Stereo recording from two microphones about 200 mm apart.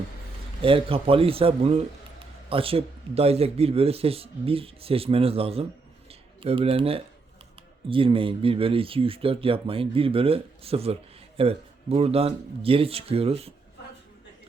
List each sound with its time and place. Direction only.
0.6 s speech: 25° right (ahead or behind)
6.1 s a sound: 30° right (ahead or behind)
7.9 s speech: 25° right (ahead or behind)